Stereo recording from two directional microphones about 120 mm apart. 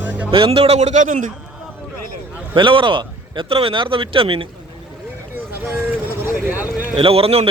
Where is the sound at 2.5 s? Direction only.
45° right (ahead or behind).